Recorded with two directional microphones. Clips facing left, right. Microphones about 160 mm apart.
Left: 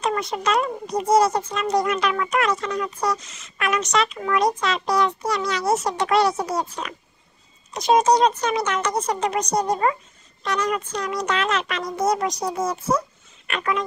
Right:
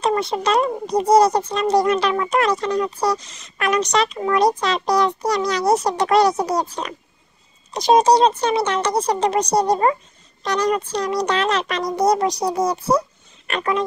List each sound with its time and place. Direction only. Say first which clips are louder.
0.0 s speech: right 4 dB; 30° right (ahead or behind)